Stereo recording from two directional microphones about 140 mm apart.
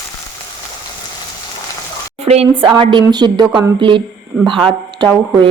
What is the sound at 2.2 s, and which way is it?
A woman's voice, 45° right (ahead or behind).